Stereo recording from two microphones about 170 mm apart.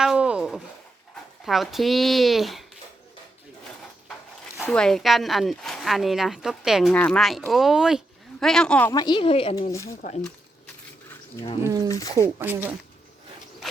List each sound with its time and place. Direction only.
0.0 s a sound: 5° right (ahead or behind)
1.5 s speech: centre (ahead or behind)
4.6 s speech: 5° left (ahead or behind)
8.9 s a woman's voice: 25° left (ahead or behind)
9.7 s speech: 15° left (ahead or behind)
11.9 s a woman's voice: 20° left (ahead or behind)
12.4 s speech: 10° right (ahead or behind)